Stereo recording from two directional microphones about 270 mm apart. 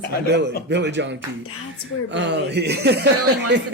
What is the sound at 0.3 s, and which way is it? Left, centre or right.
Speech, right.